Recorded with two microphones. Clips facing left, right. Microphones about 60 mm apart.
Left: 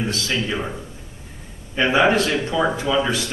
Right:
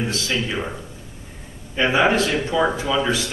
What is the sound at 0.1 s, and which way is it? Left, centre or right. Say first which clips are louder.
Speech: even; centre.